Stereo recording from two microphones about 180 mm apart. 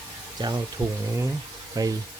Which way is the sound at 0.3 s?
25° right (ahead or behind).